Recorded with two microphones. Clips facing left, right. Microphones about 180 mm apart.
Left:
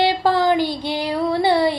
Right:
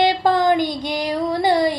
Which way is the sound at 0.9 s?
40° right (ahead or behind).